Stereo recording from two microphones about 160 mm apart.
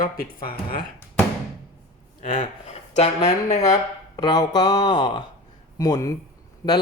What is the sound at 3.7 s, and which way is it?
Speech, 25° left (ahead or behind).